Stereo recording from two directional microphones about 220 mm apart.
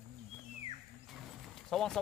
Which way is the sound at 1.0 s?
Centre (ahead or behind).